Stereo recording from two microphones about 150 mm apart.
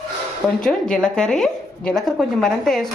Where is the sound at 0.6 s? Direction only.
5° left (ahead or behind).